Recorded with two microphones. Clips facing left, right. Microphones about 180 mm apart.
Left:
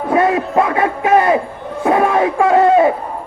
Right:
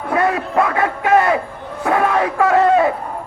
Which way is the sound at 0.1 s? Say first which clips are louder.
Left 3 dB; 20° left (ahead or behind).